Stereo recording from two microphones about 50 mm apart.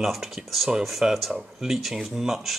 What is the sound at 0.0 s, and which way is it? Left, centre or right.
Speech, centre.